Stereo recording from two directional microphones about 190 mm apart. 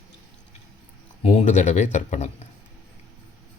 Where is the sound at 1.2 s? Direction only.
40° left (ahead or behind).